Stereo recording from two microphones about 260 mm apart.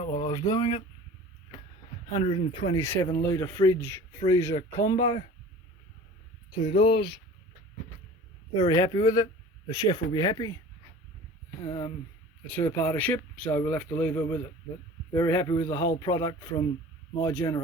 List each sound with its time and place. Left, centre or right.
0.0 s speech: centre
2.1 s speech: left
6.8 s speech: centre
8.5 s speech: centre
11.6 s speech: centre